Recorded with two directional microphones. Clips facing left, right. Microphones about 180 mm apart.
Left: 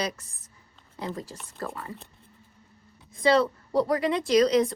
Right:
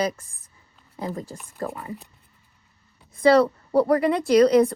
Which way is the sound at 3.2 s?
60° right (ahead or behind).